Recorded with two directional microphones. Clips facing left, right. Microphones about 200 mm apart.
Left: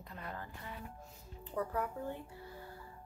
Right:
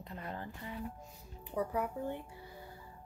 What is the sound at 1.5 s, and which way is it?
Speech, 15° right (ahead or behind).